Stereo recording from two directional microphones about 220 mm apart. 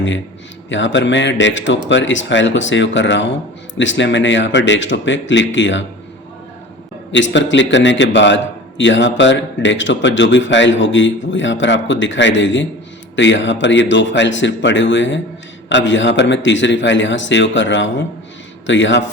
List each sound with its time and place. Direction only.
0.7 s speech: 55° left (ahead or behind)
7.1 s speech: 55° left (ahead or behind)